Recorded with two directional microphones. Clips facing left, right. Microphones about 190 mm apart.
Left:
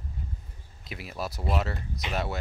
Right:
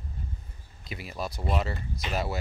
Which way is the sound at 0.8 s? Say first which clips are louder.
Even; centre (ahead or behind).